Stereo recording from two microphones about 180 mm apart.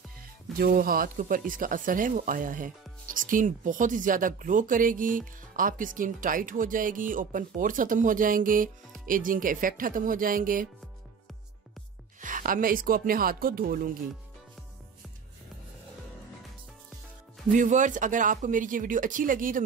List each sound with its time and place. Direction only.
0.6 s speech: 55° right (ahead or behind)
12.2 s speech: 45° right (ahead or behind)
17.5 s speech: 45° right (ahead or behind)